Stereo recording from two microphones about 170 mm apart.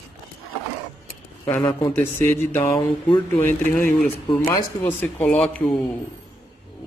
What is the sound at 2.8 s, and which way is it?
Speech, 30° left (ahead or behind).